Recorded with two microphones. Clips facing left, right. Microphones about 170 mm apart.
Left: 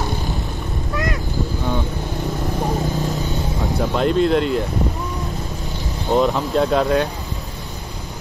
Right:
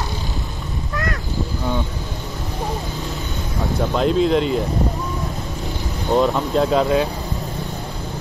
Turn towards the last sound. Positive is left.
turn(degrees=0)  # may be behind; listen again after turning